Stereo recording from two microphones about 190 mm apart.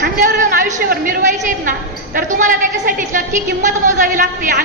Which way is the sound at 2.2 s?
40° right (ahead or behind).